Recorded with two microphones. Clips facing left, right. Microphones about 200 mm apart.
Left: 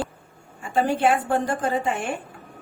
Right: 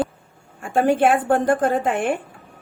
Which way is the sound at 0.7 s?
50° right (ahead or behind).